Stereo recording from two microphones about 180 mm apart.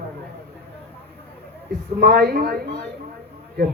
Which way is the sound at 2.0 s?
60° right (ahead or behind).